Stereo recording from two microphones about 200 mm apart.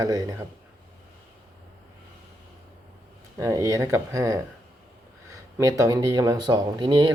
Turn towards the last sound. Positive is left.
turn(degrees=-20)  # may be behind; listen again after turning